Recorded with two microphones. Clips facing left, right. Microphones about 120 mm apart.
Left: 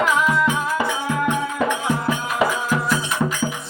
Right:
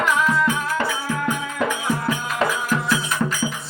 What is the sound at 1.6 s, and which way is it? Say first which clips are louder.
Music: left 2 dB; centre (ahead or behind).